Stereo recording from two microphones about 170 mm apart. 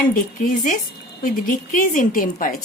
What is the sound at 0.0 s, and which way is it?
A woman's voice, 50° left (ahead or behind).